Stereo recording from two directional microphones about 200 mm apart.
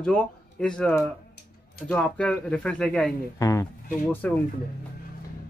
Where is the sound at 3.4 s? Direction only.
15° left (ahead or behind).